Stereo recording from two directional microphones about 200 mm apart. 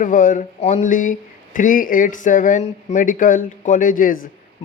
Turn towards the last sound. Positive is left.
turn(degrees=40)  # may be behind; listen again after turning